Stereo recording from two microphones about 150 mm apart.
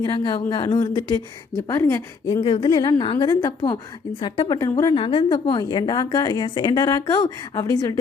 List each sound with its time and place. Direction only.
0.0 s a woman's voice: 30° left (ahead or behind)
2.2 s a woman's voice: 30° left (ahead or behind)